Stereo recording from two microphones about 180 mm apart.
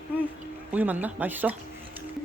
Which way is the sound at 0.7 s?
10° right (ahead or behind).